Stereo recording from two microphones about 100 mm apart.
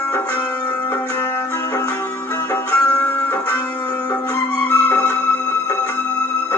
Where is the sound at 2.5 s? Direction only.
20° left (ahead or behind).